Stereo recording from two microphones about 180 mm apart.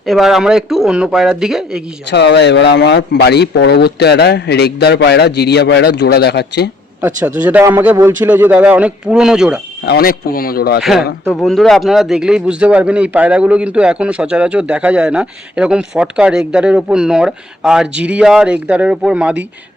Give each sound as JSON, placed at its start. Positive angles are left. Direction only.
{"t": 0.0, "sound": "speech", "side_deg": 0}
{"t": 2.0, "sound": "speech", "side_deg": 70}
{"t": 7.0, "sound": "a man's voice", "side_deg": -10}
{"t": 9.8, "sound": "speech", "side_deg": 60}
{"t": 10.8, "sound": "speech", "side_deg": 0}